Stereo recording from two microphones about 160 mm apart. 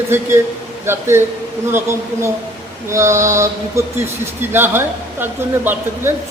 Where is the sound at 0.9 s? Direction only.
15° right (ahead or behind).